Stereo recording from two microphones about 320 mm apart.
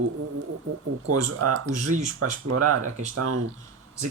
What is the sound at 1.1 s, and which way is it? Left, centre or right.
Speech, right.